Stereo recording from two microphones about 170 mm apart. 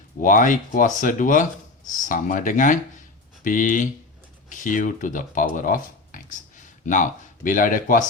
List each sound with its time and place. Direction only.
0.2 s speech: 50° left (ahead or behind)